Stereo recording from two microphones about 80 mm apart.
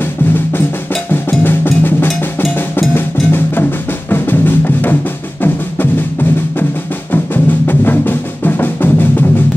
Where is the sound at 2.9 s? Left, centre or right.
Left.